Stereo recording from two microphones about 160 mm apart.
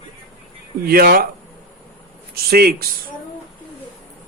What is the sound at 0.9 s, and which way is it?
Speech, 75° right (ahead or behind).